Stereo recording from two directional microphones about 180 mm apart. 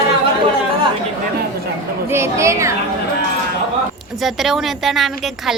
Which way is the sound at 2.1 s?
15° right (ahead or behind).